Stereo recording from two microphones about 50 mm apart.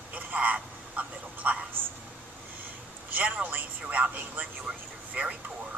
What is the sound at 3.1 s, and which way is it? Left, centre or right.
A man's voice, right.